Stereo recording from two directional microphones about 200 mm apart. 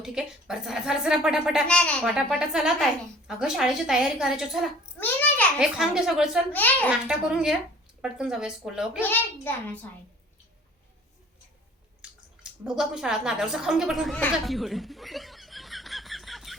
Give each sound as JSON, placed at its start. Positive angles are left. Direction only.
{"t": 0.0, "sound": "speech", "side_deg": -5}
{"t": 4.9, "sound": "a sound", "side_deg": 10}
{"t": 5.5, "sound": "speech", "side_deg": -5}
{"t": 6.5, "sound": "a child's voice", "side_deg": 10}
{"t": 7.1, "sound": "speech", "side_deg": -5}
{"t": 9.0, "sound": "a child's voice", "side_deg": 10}
{"t": 12.0, "sound": "a sound", "side_deg": -5}
{"t": 12.4, "sound": "a woman's voice", "side_deg": -5}